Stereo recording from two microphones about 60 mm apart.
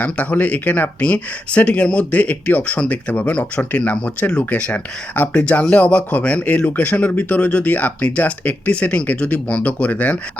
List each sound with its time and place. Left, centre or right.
0.0 s speech: left